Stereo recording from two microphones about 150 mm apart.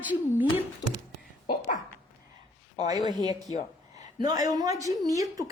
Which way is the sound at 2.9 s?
25° right (ahead or behind).